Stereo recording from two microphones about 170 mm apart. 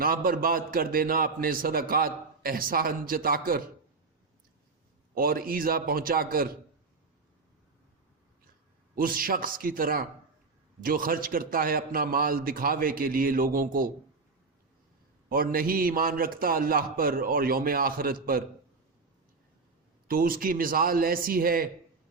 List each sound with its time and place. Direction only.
0.0 s a man's voice: 60° right (ahead or behind)
5.1 s a man's voice: 60° right (ahead or behind)
9.0 s a man's voice: 55° right (ahead or behind)
15.3 s a man's voice: 55° right (ahead or behind)
20.1 s a man's voice: 55° right (ahead or behind)